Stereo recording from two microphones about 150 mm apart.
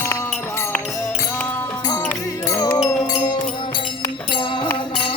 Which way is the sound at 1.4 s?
10° left (ahead or behind).